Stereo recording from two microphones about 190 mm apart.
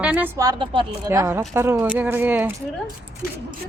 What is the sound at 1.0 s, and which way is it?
Speech, 15° right (ahead or behind).